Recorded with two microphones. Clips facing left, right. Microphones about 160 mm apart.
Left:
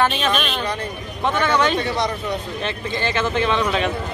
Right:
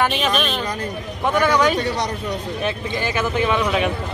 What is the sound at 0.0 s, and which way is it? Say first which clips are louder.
Speech: even; 15° right (ahead or behind).